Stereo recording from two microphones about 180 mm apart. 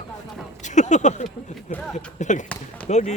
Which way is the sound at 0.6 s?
40° left (ahead or behind).